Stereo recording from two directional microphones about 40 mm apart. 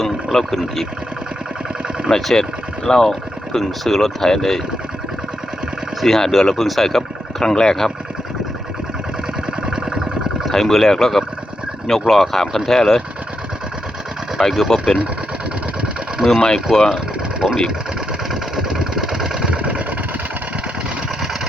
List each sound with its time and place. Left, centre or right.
0.0 s speech: centre
2.0 s speech: centre
6.0 s speech: centre
7.4 s speech: centre
9.6 s a sound: centre
10.5 s speech: centre
14.5 s speech: centre
16.2 s speech: centre
16.7 s speech: centre
18.5 s vehicle: centre
19.5 s vehicle: right